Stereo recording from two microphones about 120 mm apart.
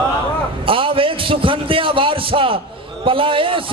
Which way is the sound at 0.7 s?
45° right (ahead or behind).